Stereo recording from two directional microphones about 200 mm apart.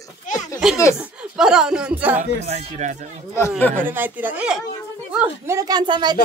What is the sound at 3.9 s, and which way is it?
A woman's voice, 10° right (ahead or behind).